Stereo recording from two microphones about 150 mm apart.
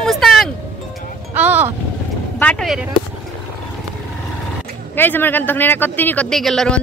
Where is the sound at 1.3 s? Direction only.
10° right (ahead or behind).